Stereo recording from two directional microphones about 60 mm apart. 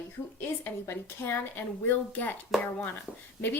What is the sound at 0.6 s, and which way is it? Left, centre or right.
A woman's voice, left.